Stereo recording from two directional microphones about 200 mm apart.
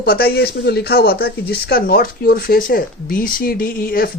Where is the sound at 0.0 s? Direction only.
50° left (ahead or behind).